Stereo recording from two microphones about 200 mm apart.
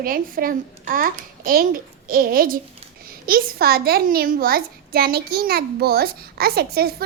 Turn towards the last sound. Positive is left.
turn(degrees=-50)  # may be behind; listen again after turning